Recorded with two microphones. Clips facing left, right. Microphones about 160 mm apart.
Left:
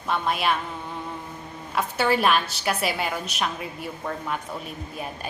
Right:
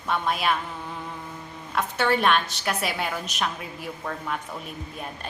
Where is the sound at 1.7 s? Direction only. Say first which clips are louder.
Left 1 dB; centre (ahead or behind).